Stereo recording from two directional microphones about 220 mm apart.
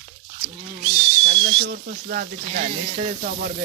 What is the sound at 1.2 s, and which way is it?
Speech, 55° right (ahead or behind).